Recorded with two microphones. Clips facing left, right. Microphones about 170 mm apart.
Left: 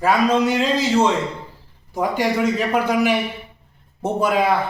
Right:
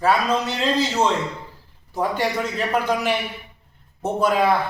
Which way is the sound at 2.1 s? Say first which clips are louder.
Left 4 dB; 10° left (ahead or behind).